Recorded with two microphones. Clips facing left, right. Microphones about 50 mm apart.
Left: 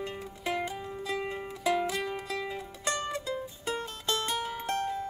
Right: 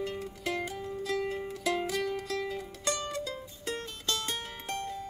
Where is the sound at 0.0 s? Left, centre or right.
Left.